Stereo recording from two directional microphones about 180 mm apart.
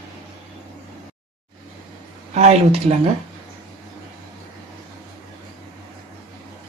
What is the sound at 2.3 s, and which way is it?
Speech, 35° right (ahead or behind).